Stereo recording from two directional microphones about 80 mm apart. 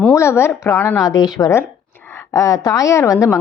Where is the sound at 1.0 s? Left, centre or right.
Left.